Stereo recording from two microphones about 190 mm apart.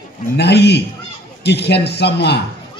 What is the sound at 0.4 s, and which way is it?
A man's voice, 60° left (ahead or behind).